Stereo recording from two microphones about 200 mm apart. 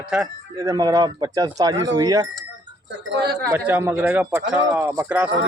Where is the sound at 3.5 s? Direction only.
10° right (ahead or behind).